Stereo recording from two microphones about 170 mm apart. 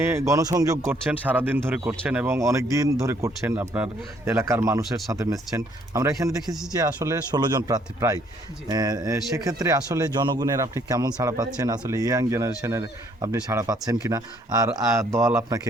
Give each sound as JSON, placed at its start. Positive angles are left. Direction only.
{"t": 0.0, "sound": "speech", "side_deg": -15}
{"t": 6.5, "sound": "speech", "side_deg": -5}
{"t": 6.7, "sound": "speech", "side_deg": -20}